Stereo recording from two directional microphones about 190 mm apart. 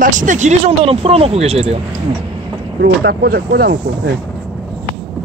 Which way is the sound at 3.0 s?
55° right (ahead or behind).